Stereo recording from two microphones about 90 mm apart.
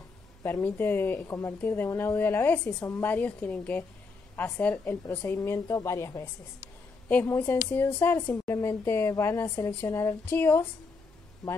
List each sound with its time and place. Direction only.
0.4 s a woman's voice: 25° left (ahead or behind)
7.2 s a woman's voice: 25° left (ahead or behind)
11.4 s speech: 5° left (ahead or behind)